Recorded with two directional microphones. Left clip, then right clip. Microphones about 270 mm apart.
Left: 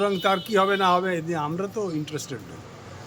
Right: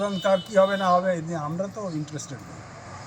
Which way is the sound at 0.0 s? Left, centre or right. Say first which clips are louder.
Left 1 dB; left.